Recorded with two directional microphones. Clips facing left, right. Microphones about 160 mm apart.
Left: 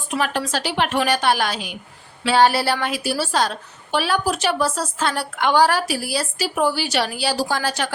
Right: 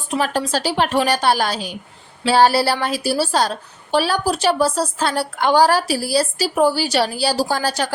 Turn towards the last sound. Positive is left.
turn(degrees=-35)  # may be behind; listen again after turning